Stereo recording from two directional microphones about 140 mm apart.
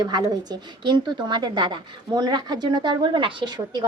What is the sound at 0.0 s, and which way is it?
A woman's voice, 30° right (ahead or behind).